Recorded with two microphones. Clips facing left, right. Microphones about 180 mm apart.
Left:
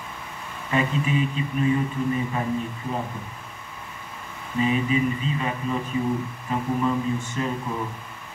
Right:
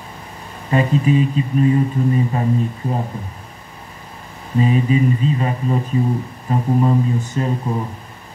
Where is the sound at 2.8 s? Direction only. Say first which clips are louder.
Right 6 dB; 35° right (ahead or behind).